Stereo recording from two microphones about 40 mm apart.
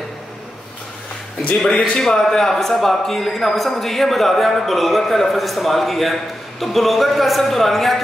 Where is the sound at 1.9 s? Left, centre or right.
Centre.